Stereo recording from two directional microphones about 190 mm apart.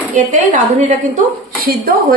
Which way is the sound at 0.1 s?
40° right (ahead or behind).